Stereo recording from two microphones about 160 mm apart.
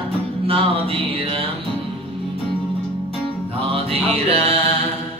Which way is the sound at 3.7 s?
35° right (ahead or behind).